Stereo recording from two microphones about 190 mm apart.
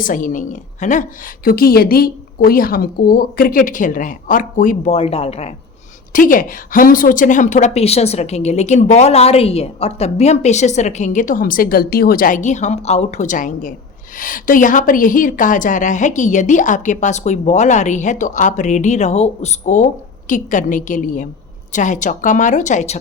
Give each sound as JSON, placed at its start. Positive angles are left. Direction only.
{"t": 0.0, "sound": "a woman's voice", "side_deg": 45}
{"t": 1.5, "sound": "a woman's voice", "side_deg": 50}
{"t": 6.1, "sound": "a woman's voice", "side_deg": 45}